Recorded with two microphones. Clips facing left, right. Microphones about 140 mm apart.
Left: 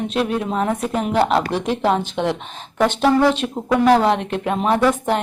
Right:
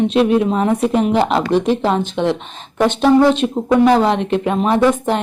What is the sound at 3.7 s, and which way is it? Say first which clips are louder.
Speech: right 2 dB; centre (ahead or behind).